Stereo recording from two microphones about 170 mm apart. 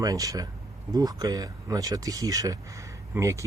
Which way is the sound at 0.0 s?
20° right (ahead or behind).